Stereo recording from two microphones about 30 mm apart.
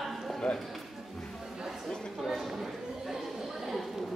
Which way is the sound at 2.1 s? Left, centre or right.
Centre.